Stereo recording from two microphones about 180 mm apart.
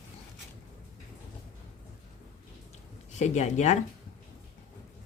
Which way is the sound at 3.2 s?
40° left (ahead or behind).